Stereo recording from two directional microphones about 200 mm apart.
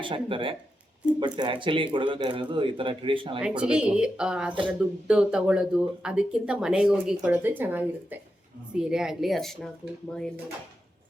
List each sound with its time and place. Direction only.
0.0 s speech: 25° right (ahead or behind)
3.4 s speech: 5° right (ahead or behind)